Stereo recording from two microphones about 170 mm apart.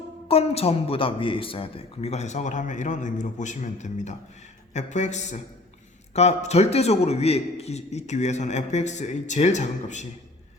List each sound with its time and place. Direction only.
0.3 s speech: 35° left (ahead or behind)